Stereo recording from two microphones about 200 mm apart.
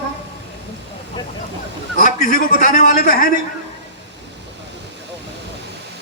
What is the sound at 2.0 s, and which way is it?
A man's voice, 40° left (ahead or behind).